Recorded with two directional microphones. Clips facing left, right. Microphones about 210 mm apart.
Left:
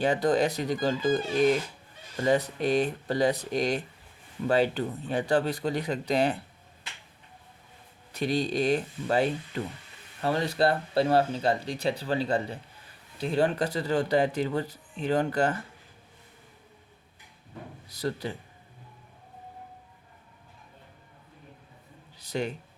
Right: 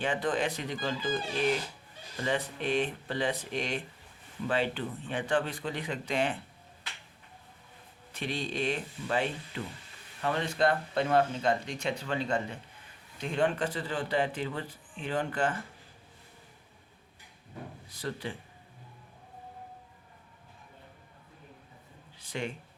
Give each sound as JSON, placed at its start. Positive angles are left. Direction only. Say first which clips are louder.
{"t": 0.0, "sound": "speech", "louder": "left 6 dB", "side_deg": 40}
{"t": 8.1, "sound": "speech", "louder": "left 7 dB", "side_deg": 40}
{"t": 17.8, "sound": "speech", "louder": "left 6 dB", "side_deg": 40}
{"t": 22.2, "sound": "a sound", "louder": "left 5 dB", "side_deg": 40}